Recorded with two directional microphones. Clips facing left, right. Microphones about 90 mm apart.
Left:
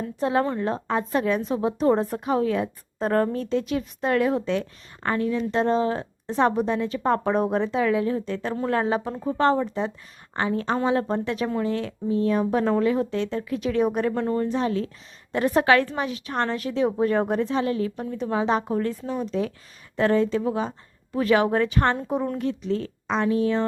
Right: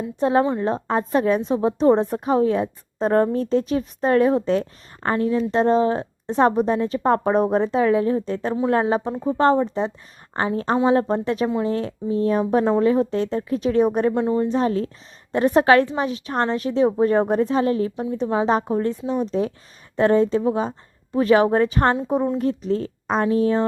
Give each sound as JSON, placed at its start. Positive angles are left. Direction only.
{"t": 0.2, "sound": "speech", "side_deg": -35}
{"t": 8.5, "sound": "speech", "side_deg": -20}
{"t": 14.1, "sound": "speech", "side_deg": -20}
{"t": 14.5, "sound": "speech", "side_deg": -35}